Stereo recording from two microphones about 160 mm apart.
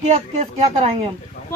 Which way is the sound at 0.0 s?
50° right (ahead or behind).